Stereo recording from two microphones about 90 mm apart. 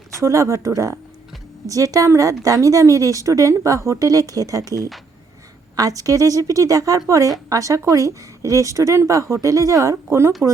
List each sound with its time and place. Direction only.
0.2 s a woman's voice: 35° right (ahead or behind)